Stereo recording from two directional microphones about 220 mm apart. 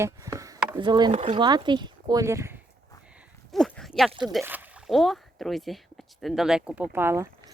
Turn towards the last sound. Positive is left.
turn(degrees=-10)  # may be behind; listen again after turning